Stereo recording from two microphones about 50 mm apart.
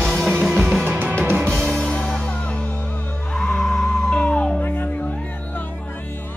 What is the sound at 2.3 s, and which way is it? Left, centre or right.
Music, left.